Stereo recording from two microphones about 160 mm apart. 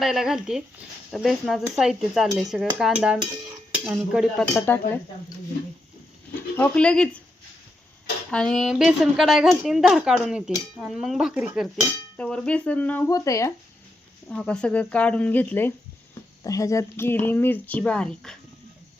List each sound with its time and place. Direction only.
0.0 s a woman's voice: centre (ahead or behind)
4.6 s speech: 15° left (ahead or behind)
6.6 s speech: 5° left (ahead or behind)
8.3 s a woman's voice: 5° left (ahead or behind)
12.1 s speech: 5° left (ahead or behind)
13.1 s speech: 20° left (ahead or behind)
14.3 s speech: 5° left (ahead or behind)